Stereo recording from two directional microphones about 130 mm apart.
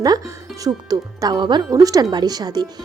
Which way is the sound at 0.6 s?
30° right (ahead or behind).